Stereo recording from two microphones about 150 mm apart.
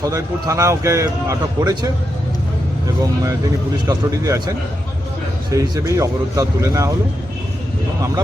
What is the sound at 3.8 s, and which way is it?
Speech, 20° right (ahead or behind).